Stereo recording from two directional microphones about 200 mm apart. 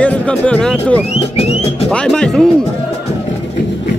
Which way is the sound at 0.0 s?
5° left (ahead or behind).